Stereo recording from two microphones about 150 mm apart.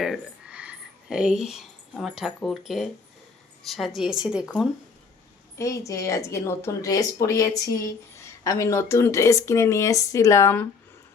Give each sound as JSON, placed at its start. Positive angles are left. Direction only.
{"t": 0.0, "sound": "a woman's voice", "side_deg": -5}
{"t": 5.5, "sound": "speech", "side_deg": 20}